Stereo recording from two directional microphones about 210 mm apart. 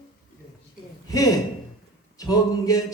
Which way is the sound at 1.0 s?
15° left (ahead or behind).